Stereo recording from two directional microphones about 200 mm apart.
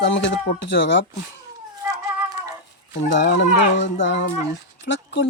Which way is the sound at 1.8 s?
15° right (ahead or behind).